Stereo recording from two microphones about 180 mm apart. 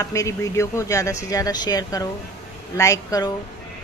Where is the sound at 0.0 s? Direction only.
15° left (ahead or behind).